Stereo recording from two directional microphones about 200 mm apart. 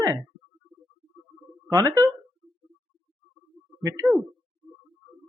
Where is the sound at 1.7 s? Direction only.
15° right (ahead or behind).